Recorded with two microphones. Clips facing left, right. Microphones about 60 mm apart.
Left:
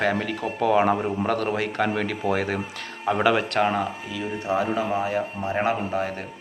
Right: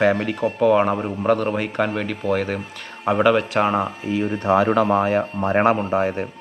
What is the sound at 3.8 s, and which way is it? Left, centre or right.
Speech, right.